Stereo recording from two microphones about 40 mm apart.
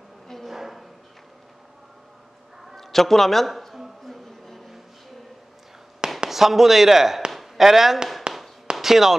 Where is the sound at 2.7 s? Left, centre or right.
Centre.